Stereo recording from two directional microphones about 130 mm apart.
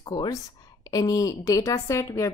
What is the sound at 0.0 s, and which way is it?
A woman's voice, 30° left (ahead or behind).